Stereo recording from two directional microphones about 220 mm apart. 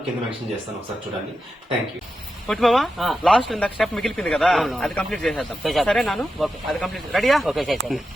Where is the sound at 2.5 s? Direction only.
Centre (ahead or behind).